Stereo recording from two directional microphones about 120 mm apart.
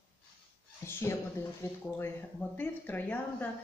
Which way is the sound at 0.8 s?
20° left (ahead or behind).